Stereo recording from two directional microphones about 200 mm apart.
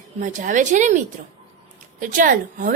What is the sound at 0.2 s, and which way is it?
A woman's voice, 40° right (ahead or behind).